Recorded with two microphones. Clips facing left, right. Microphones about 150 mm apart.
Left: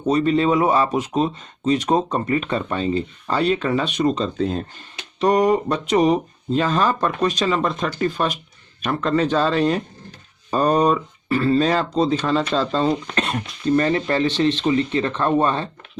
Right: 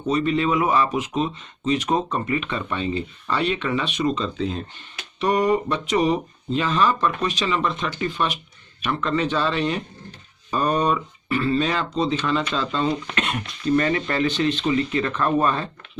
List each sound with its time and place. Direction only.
0.1 s speech: 35° left (ahead or behind)